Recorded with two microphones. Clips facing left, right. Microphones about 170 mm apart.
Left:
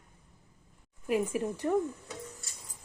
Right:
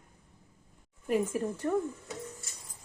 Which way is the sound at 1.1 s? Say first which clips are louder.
Even; 10° left (ahead or behind).